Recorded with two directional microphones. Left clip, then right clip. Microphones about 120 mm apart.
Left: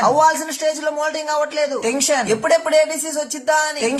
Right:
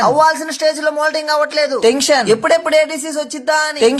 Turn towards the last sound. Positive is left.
turn(degrees=-30)  # may be behind; listen again after turning